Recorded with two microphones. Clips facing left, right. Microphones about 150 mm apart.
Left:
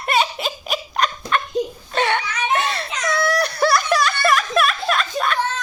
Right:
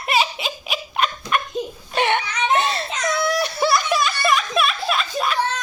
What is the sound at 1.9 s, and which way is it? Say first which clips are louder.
Baby cry: right 4 dB; 20° right (ahead or behind).